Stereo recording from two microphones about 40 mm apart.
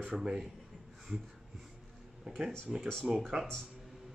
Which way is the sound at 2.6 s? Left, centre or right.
Right.